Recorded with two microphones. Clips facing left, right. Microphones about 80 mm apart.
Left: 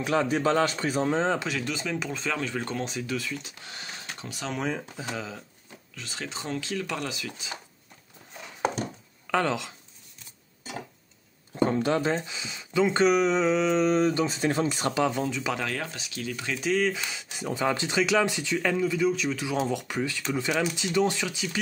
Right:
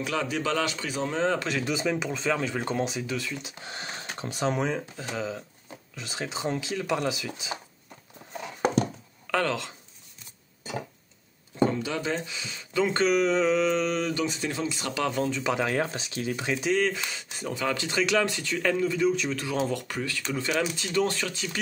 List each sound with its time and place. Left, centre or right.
0.0 s a man's voice: left
1.6 s speech: centre
3.6 s speech: right
4.6 s speech: centre
5.9 s speech: centre
9.3 s speech: centre
11.5 s speech: left
12.1 s speech: left
15.1 s speech: centre
15.6 s speech: right
16.6 s speech: centre
17.6 s speech: left
17.9 s speech: centre